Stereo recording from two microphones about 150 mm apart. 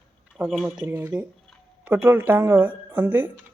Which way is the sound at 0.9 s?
15° right (ahead or behind).